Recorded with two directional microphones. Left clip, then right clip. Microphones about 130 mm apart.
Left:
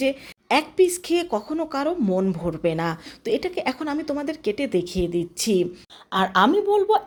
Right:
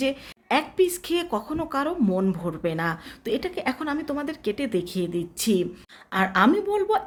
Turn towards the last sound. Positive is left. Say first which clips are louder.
# left 4 dB
turn(degrees=5)  # may be behind; listen again after turning